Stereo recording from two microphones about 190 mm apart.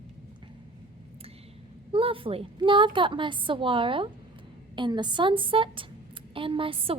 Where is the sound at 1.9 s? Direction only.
30° right (ahead or behind).